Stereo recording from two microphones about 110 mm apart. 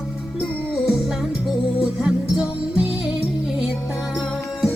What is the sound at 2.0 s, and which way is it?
Music, 10° right (ahead or behind).